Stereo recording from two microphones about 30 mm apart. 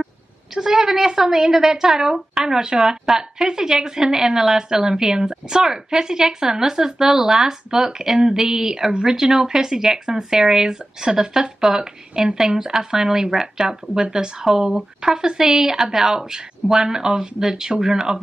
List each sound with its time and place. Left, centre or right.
0.6 s a woman's voice: centre
3.2 s a woman's voice: right